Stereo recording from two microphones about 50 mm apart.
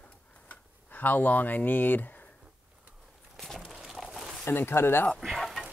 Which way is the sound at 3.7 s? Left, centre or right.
Centre.